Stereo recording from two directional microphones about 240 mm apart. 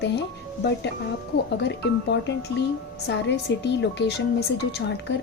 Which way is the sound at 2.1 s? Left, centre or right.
Left.